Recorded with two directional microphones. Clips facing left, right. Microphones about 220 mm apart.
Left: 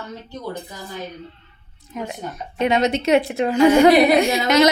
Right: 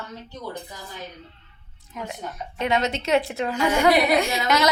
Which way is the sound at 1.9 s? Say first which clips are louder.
Left 4 dB; 20° left (ahead or behind).